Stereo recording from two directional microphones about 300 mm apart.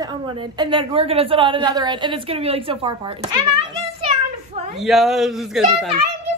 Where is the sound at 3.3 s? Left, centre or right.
Centre.